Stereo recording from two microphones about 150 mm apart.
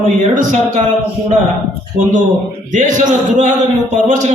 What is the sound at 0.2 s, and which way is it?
Speech, 55° right (ahead or behind).